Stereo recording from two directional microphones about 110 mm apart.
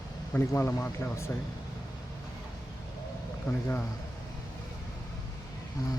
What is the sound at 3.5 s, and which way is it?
Speech, 30° left (ahead or behind).